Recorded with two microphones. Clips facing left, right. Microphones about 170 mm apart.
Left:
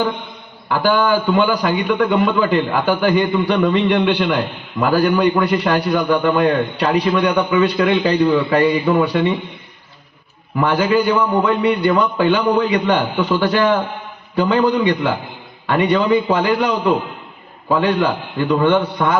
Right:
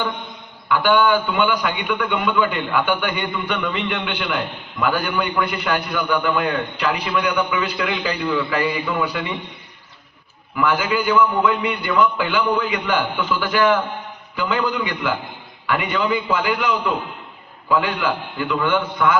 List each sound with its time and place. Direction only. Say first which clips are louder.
0.7 s a man's voice: left 1 dB; 40° left (ahead or behind)
10.6 s a man's voice: left 5 dB; 35° left (ahead or behind)